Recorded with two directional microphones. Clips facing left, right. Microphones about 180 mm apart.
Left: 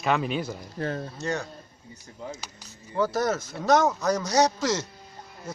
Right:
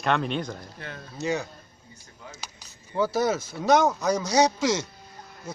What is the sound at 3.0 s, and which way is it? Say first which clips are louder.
A man's voice: right 1 dB; 5° right (ahead or behind).